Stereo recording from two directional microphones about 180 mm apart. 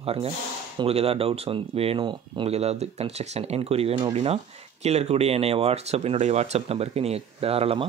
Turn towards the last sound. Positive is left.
turn(degrees=-30)  # may be behind; listen again after turning